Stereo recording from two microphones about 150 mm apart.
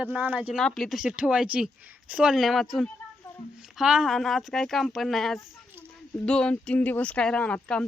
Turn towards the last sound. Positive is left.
turn(degrees=5)  # may be behind; listen again after turning